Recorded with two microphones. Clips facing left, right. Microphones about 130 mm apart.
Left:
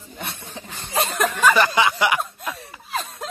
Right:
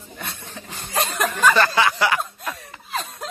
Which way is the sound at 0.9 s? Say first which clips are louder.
Left 1 dB; centre (ahead or behind).